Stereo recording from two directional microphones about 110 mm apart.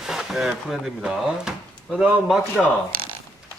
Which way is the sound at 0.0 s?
5° right (ahead or behind).